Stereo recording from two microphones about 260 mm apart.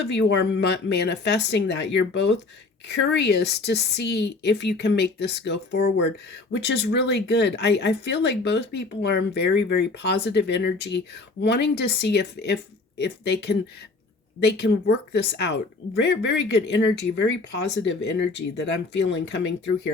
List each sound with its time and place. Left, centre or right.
0.1 s speech: left